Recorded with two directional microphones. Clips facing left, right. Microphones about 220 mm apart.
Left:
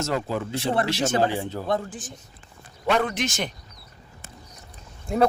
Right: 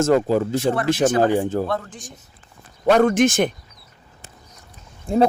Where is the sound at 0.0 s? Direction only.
45° right (ahead or behind).